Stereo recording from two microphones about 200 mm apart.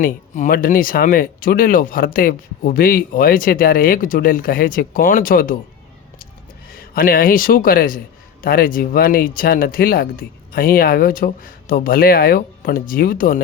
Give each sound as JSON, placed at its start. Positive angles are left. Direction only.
{"t": 0.0, "sound": "a man's voice", "side_deg": 40}
{"t": 6.9, "sound": "a man's voice", "side_deg": 45}